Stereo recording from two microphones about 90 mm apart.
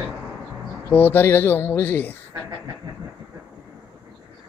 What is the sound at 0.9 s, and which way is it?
Speech, 20° left (ahead or behind).